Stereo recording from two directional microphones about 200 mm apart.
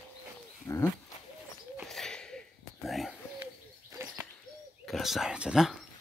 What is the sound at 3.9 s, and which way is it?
Bird, 15° right (ahead or behind).